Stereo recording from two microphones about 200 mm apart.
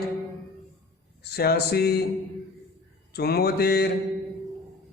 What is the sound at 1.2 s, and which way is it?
Speech, 55° left (ahead or behind).